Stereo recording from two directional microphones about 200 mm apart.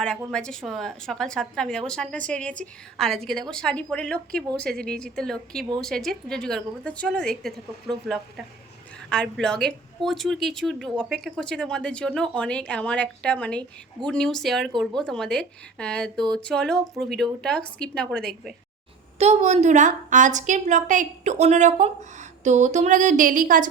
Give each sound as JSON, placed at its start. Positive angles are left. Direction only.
{"t": 0.3, "sound": "a woman's voice", "side_deg": 5}
{"t": 19.2, "sound": "a woman's voice", "side_deg": -35}